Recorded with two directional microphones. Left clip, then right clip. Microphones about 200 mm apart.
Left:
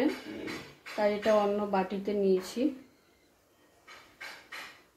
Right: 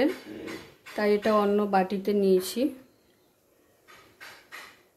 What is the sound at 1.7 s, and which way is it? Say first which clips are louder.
Speech: right 6 dB; 45° right (ahead or behind).